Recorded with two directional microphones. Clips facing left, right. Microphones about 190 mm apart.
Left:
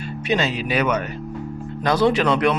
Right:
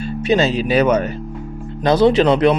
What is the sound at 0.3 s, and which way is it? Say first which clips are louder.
Speech: right 6 dB; 30° right (ahead or behind).